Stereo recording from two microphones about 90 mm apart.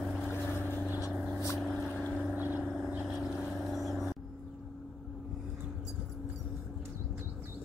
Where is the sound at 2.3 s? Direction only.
20° right (ahead or behind).